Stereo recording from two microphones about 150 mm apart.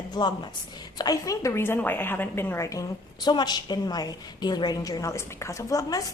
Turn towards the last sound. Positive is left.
turn(degrees=25)  # may be behind; listen again after turning